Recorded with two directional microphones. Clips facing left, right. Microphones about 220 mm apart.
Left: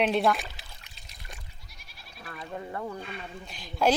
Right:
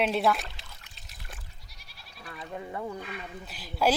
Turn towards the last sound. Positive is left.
turn(degrees=-5)  # may be behind; listen again after turning